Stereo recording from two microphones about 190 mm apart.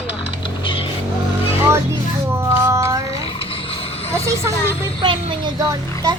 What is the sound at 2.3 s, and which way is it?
Music, 15° right (ahead or behind).